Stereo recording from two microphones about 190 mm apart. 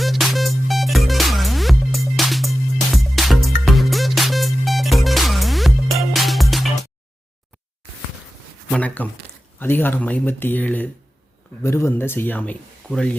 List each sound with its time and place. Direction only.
0.0 s music: centre (ahead or behind)
8.7 s speech: 5° left (ahead or behind)